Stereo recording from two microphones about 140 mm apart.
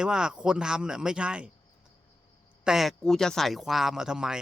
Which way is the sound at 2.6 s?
5° right (ahead or behind).